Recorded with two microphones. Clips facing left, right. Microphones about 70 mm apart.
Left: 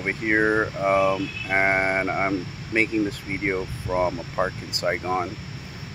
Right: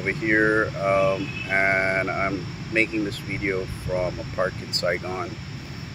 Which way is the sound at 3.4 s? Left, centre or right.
Left.